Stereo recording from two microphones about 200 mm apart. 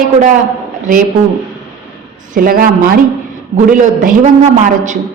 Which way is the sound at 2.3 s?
45° right (ahead or behind).